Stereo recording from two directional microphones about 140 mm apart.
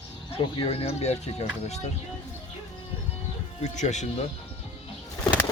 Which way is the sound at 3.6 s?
55° left (ahead or behind).